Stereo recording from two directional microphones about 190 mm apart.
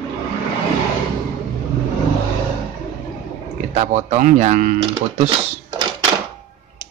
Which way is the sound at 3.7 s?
35° right (ahead or behind).